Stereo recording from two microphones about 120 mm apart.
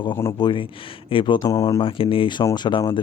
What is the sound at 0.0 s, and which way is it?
Speech, 25° left (ahead or behind).